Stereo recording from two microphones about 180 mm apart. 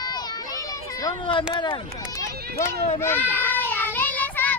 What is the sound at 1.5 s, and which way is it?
Speech, 25° left (ahead or behind).